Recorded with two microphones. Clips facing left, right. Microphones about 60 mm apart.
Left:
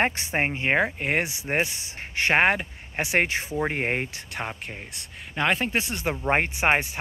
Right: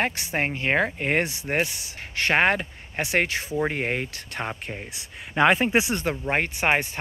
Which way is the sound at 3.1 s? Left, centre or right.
Left.